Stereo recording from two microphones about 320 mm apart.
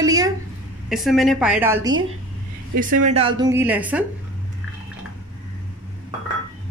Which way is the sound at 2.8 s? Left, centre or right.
Right.